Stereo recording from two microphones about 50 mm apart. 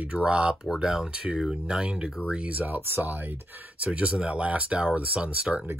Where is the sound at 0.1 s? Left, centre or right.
Right.